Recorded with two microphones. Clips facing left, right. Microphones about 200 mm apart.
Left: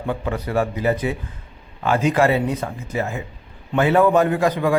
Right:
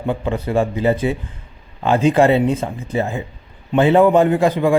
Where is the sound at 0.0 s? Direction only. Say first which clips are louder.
Right 3 dB; 25° right (ahead or behind).